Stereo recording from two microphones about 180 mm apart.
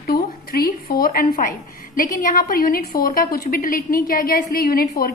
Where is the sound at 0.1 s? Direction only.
55° left (ahead or behind).